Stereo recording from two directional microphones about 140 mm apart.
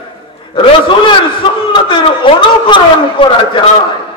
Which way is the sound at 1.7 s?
35° left (ahead or behind).